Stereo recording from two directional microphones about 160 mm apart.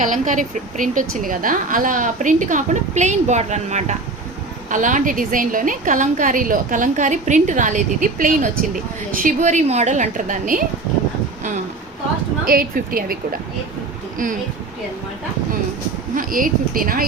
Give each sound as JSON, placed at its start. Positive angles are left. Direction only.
{"t": 0.0, "sound": "a woman's voice", "side_deg": -55}
{"t": 12.5, "sound": "a woman's voice", "side_deg": -65}
{"t": 16.1, "sound": "a woman's voice", "side_deg": -60}